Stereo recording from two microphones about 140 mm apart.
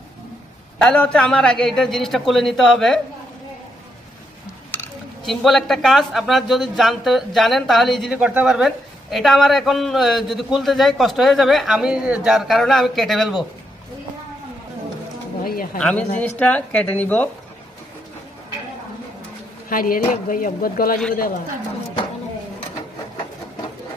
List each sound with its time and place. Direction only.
0.7 s speech: 5° left (ahead or behind)
5.2 s speech: centre (ahead or behind)
15.4 s speech: 90° left
15.8 s a woman's voice: 5° left (ahead or behind)
19.7 s speech: 85° left